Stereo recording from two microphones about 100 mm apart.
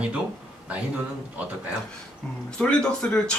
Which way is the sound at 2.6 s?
10° left (ahead or behind).